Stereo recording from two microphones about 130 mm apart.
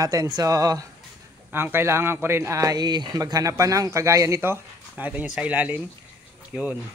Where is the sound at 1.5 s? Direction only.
15° right (ahead or behind).